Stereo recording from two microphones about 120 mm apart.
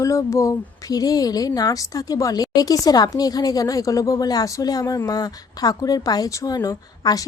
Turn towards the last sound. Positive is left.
turn(degrees=30)  # may be behind; listen again after turning